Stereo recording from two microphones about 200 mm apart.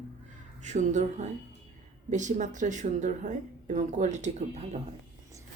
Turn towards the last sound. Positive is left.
turn(degrees=-35)  # may be behind; listen again after turning